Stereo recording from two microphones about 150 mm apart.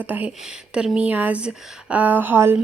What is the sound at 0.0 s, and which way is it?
Speech, 10° right (ahead or behind).